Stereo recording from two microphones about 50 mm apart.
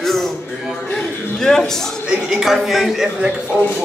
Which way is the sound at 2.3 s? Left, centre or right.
Centre.